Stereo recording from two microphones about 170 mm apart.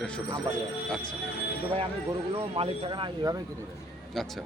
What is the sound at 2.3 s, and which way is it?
Speech, 35° right (ahead or behind).